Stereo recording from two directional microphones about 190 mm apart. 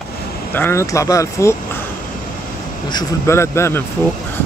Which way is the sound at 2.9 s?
20° left (ahead or behind).